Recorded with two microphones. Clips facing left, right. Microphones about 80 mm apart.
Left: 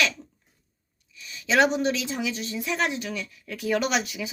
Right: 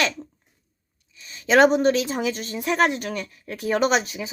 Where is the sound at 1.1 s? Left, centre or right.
Right.